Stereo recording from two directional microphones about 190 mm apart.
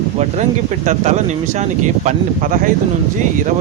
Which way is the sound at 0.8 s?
40° right (ahead or behind).